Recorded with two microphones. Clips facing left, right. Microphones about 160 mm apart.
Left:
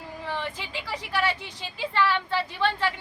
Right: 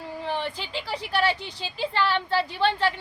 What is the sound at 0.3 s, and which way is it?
A woman's voice, 30° right (ahead or behind).